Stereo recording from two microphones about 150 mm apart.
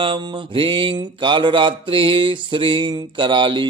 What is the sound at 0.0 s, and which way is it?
Mantra, 35° right (ahead or behind).